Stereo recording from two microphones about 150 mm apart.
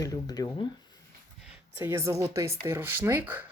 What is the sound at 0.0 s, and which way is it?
Speech, 25° left (ahead or behind).